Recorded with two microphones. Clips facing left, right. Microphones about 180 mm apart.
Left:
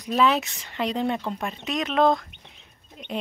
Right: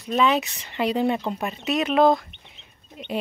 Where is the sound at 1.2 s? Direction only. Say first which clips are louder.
Right 2 dB; 15° right (ahead or behind).